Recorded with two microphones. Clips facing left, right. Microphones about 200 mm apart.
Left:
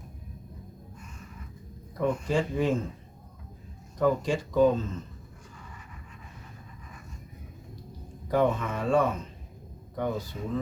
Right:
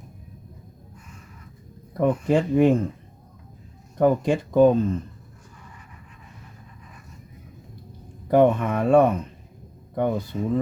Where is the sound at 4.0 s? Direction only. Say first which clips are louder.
Right 6 dB; 55° right (ahead or behind).